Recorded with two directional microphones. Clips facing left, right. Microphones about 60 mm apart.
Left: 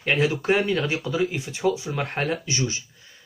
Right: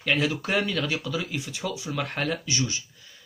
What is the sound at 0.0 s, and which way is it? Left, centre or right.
Speech, left.